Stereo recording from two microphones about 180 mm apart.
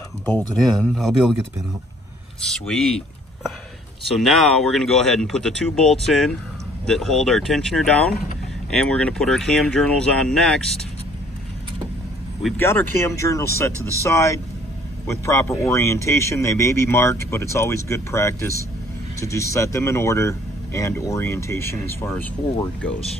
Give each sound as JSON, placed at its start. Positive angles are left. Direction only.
{"t": 0.6, "sound": "speech", "side_deg": 0}
{"t": 2.5, "sound": "speech", "side_deg": 5}
{"t": 4.1, "sound": "speech", "side_deg": 0}
{"t": 12.5, "sound": "a man's voice", "side_deg": 15}